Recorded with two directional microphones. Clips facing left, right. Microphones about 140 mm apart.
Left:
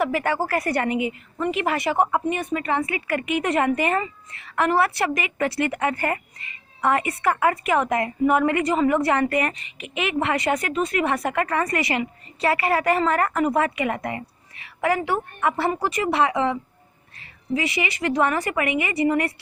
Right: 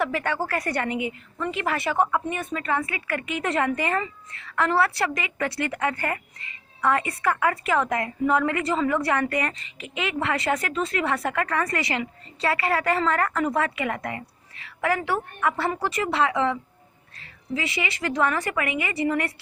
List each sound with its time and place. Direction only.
0.2 s speech: 35° left (ahead or behind)
15.7 s speech: 15° left (ahead or behind)
18.0 s speech: 20° left (ahead or behind)